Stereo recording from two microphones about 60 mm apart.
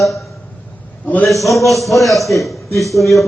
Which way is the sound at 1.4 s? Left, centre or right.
Centre.